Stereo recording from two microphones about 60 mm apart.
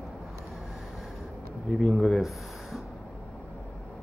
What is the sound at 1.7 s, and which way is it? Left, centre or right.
Speech, centre.